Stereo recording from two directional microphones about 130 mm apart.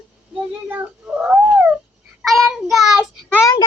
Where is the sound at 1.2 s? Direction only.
10° right (ahead or behind).